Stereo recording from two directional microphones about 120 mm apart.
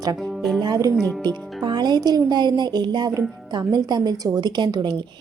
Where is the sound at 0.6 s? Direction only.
30° right (ahead or behind).